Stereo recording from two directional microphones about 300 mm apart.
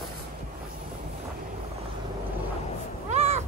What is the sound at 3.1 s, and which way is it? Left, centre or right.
Cat, right.